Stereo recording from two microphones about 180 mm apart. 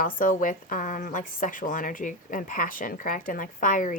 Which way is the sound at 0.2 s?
50° left (ahead or behind).